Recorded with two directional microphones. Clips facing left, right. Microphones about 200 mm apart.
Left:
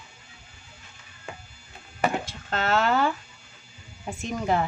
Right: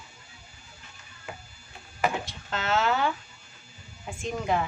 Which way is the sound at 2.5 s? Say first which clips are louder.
Left 3 dB; 50° left (ahead or behind).